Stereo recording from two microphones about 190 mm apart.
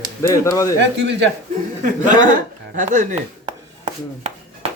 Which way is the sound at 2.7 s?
40° right (ahead or behind).